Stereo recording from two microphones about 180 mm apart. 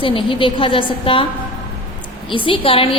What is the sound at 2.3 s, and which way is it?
Speech, 30° left (ahead or behind).